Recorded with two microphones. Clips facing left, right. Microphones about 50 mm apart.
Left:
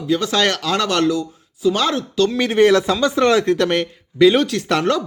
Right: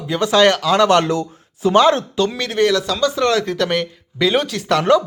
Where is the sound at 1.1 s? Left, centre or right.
Right.